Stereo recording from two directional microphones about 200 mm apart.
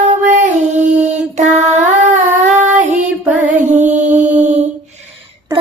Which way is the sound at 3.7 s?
35° right (ahead or behind).